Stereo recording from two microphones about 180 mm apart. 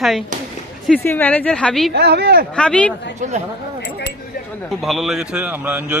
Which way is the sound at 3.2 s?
45° right (ahead or behind).